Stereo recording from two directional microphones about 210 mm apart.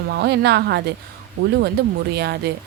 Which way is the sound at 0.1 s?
50° right (ahead or behind).